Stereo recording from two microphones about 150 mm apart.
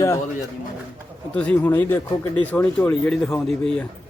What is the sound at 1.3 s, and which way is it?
Speech, 10° left (ahead or behind).